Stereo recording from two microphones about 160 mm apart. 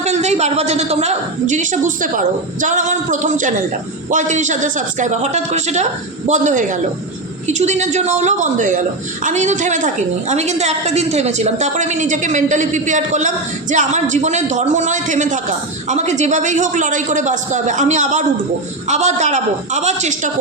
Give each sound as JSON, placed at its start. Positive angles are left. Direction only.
{"t": 0.0, "sound": "a woman's voice", "side_deg": -45}